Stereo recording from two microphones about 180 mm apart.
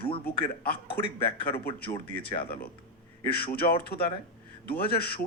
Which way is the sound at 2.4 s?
55° left (ahead or behind).